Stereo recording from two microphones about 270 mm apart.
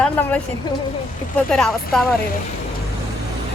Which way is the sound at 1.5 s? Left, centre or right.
Centre.